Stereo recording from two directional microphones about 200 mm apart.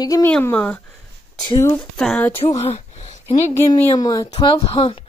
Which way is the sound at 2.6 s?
35° left (ahead or behind).